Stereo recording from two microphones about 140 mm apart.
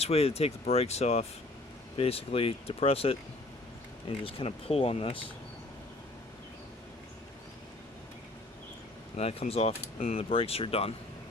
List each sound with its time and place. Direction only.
0.0 s speech: 45° left (ahead or behind)
4.2 s speech: 40° left (ahead or behind)
9.1 s speech: 50° left (ahead or behind)